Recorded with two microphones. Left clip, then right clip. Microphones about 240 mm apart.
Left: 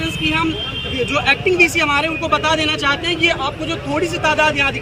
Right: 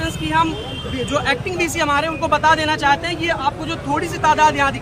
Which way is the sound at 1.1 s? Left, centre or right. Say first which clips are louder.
Left 5 dB; centre.